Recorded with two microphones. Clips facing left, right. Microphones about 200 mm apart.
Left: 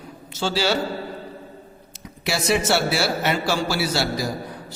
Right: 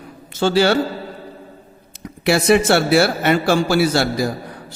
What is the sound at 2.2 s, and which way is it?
A man's voice, 55° right (ahead or behind).